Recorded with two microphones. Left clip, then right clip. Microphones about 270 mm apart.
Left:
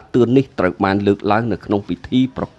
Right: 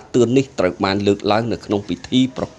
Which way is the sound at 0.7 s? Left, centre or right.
Left.